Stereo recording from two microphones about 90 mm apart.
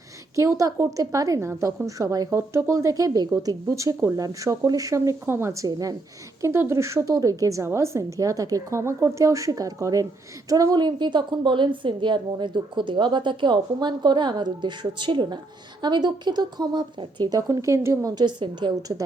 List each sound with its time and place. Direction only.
0.3 s a woman's voice: 35° right (ahead or behind)
2.3 s a woman's voice: 30° right (ahead or behind)
6.4 s a woman's voice: 30° right (ahead or behind)
18.1 s speech: 55° right (ahead or behind)